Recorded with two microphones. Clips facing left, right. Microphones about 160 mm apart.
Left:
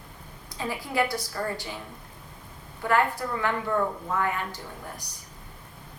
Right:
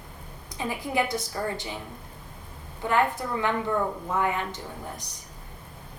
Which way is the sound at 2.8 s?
20° right (ahead or behind).